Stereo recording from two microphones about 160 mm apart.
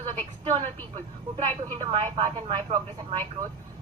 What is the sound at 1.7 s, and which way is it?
A woman's voice, 40° right (ahead or behind).